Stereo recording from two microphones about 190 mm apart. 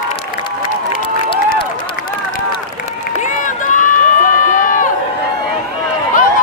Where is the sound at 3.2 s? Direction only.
40° left (ahead or behind).